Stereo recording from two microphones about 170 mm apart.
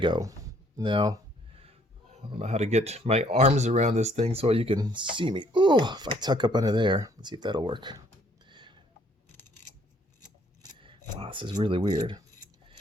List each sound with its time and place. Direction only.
0.0 s speech: 25° right (ahead or behind)
2.1 s speech: 40° right (ahead or behind)
8.4 s a sound: 25° right (ahead or behind)
10.6 s scissors: 30° right (ahead or behind)